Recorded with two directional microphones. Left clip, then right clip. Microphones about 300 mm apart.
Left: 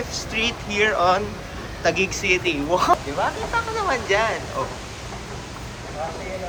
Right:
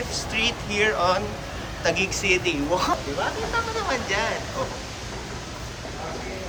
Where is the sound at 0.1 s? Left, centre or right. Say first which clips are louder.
Even; centre.